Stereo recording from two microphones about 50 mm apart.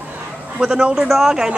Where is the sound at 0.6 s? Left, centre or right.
Centre.